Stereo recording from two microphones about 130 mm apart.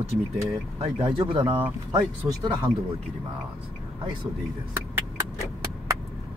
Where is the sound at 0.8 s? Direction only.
45° right (ahead or behind).